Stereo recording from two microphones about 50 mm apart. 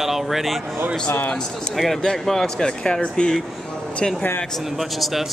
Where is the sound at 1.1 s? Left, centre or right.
Left.